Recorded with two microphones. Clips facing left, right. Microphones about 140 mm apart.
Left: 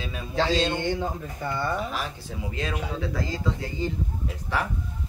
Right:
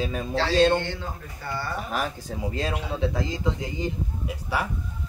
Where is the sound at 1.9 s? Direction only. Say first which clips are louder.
Right 4 dB; 45° right (ahead or behind).